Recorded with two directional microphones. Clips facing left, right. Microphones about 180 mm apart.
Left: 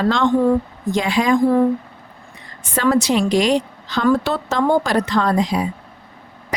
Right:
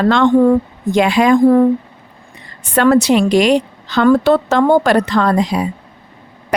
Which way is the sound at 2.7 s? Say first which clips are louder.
Right 6 dB; 65° right (ahead or behind).